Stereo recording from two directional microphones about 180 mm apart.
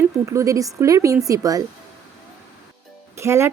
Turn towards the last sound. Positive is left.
turn(degrees=-15)  # may be behind; listen again after turning